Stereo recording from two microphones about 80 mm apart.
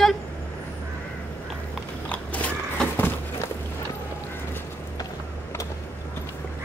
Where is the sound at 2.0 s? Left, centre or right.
Centre.